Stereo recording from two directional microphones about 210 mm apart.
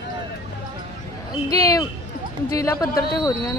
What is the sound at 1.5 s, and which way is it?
Speech, 15° left (ahead or behind).